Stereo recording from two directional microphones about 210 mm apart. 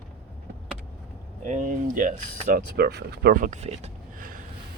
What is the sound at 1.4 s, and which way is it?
Speech, 35° right (ahead or behind).